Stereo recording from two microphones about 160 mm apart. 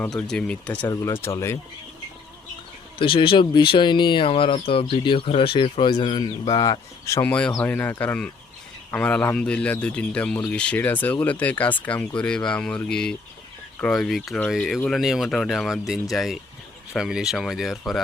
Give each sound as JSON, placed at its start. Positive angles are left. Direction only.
{"t": 0.2, "sound": "speech", "side_deg": 5}
{"t": 3.0, "sound": "speech", "side_deg": 30}